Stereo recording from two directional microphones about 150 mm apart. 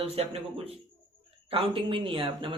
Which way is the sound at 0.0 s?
45° right (ahead or behind).